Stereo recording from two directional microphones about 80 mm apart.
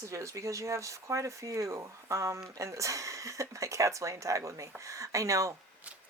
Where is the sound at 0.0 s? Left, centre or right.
Right.